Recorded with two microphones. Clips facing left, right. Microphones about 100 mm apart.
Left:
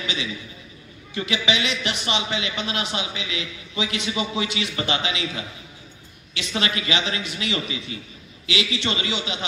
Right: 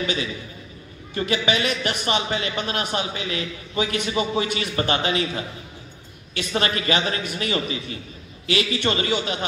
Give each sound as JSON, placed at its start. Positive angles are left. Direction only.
{"t": 0.0, "sound": "a man's voice", "side_deg": -45}